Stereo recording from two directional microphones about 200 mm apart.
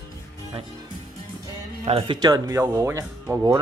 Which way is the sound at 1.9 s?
25° right (ahead or behind).